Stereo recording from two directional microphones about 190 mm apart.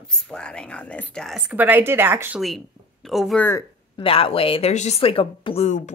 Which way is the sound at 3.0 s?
Centre (ahead or behind).